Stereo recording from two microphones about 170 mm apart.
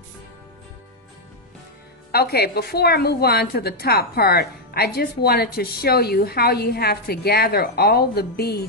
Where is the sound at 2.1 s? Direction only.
65° left (ahead or behind).